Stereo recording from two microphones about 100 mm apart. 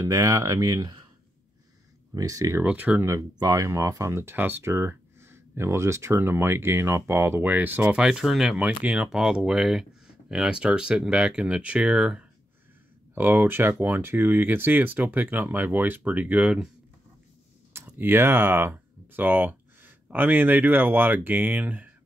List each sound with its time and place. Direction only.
0.0 s speech: 35° right (ahead or behind)
2.1 s speech: 35° right (ahead or behind)
2.6 s speech: 15° right (ahead or behind)
3.1 s speech: 35° right (ahead or behind); by 12.3 s 10° right (ahead or behind)
13.1 s speech: 20° right (ahead or behind)
17.8 s speech: 20° right (ahead or behind)